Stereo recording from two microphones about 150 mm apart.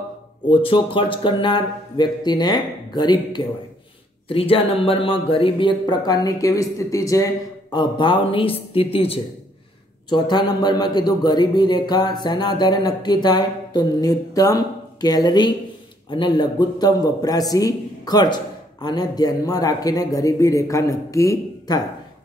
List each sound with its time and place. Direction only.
0.5 s a man's voice: 35° left (ahead or behind)